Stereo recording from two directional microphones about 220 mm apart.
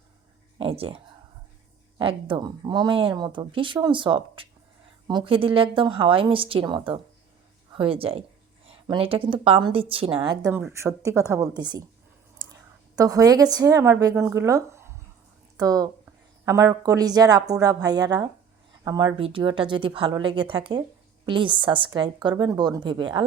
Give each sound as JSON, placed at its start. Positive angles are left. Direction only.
{"t": 0.6, "sound": "a woman's voice", "side_deg": -25}
{"t": 13.0, "sound": "a woman's voice", "side_deg": -15}